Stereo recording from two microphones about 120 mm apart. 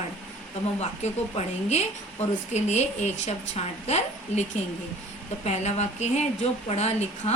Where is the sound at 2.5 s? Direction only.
70° left (ahead or behind).